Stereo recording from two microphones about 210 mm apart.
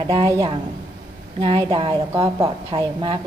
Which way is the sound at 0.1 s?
15° right (ahead or behind).